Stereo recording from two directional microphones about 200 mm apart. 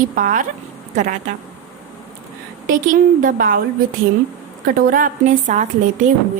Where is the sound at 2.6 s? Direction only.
45° right (ahead or behind).